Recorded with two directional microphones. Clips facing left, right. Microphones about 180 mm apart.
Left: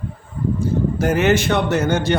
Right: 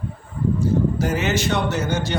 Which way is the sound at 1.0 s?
55° left (ahead or behind).